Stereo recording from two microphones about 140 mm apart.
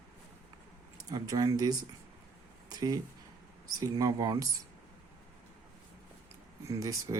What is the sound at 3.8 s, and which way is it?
Speech, 25° right (ahead or behind).